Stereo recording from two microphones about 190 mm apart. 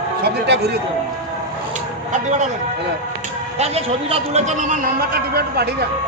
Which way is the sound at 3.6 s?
30° right (ahead or behind).